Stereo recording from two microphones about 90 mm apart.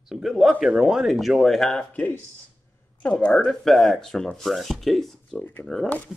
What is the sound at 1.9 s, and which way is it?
Speech, 15° left (ahead or behind).